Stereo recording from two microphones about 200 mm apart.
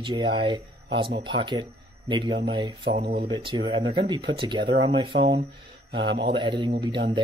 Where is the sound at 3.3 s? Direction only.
25° right (ahead or behind).